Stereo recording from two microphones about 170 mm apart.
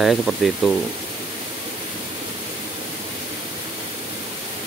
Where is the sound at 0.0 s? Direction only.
Centre (ahead or behind).